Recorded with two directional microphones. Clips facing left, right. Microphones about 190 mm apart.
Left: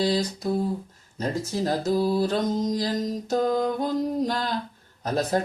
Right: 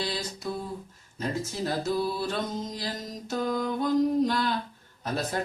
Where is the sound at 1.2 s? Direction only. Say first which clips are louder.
Left 4 dB; 40° left (ahead or behind).